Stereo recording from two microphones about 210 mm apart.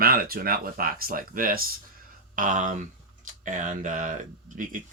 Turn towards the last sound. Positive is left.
turn(degrees=-40)  # may be behind; listen again after turning